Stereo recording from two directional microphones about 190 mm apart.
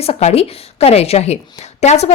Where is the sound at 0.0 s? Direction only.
35° left (ahead or behind).